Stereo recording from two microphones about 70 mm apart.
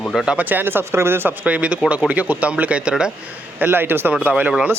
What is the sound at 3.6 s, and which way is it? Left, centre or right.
Speech, right.